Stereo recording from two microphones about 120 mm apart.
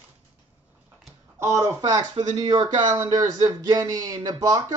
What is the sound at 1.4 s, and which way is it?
Speech, 25° right (ahead or behind).